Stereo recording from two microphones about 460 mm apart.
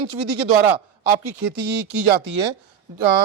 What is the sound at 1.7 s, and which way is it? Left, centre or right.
Speech, right.